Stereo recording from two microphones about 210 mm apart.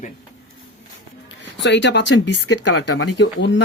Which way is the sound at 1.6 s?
60° left (ahead or behind).